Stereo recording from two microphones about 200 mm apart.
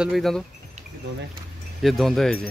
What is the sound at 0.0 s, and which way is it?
Speech, centre (ahead or behind).